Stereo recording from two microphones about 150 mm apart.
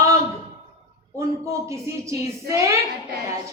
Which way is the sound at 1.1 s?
20° right (ahead or behind).